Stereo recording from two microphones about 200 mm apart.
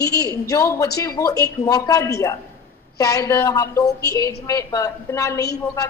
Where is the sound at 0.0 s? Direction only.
15° left (ahead or behind).